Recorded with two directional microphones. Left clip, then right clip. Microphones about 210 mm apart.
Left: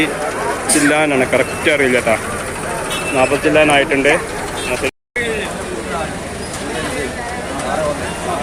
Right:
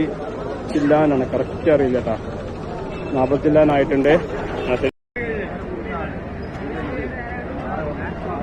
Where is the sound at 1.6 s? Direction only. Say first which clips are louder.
Left 1 dB; 20° left (ahead or behind).